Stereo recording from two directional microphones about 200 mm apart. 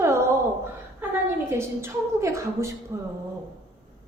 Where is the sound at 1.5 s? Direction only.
15° right (ahead or behind).